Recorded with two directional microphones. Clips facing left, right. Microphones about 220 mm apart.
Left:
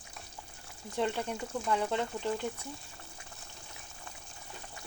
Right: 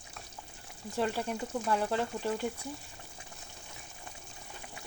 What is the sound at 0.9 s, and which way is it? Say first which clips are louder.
Speech: even; 5° right (ahead or behind).